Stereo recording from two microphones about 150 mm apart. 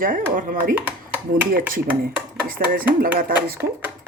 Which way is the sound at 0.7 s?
10° right (ahead or behind).